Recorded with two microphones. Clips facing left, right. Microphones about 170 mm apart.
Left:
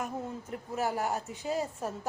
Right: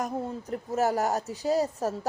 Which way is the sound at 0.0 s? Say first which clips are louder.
Right 5 dB; 40° right (ahead or behind).